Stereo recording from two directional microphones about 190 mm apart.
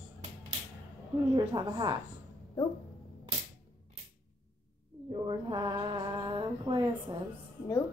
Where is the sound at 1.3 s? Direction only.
25° right (ahead or behind).